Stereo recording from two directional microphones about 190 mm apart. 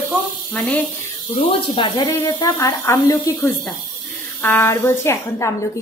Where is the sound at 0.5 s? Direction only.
5° left (ahead or behind).